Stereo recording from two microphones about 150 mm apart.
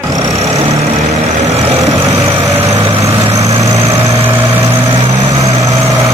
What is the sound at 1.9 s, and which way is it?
Vehicle, 25° right (ahead or behind).